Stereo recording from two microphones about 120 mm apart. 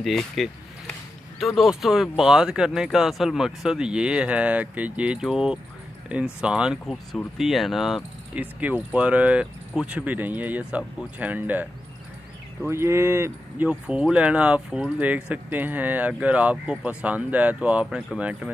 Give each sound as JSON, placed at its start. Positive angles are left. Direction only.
{"t": 0.0, "sound": "speech", "side_deg": 0}
{"t": 8.4, "sound": "speech", "side_deg": -15}
{"t": 12.6, "sound": "speech", "side_deg": -20}
{"t": 13.7, "sound": "speech", "side_deg": -10}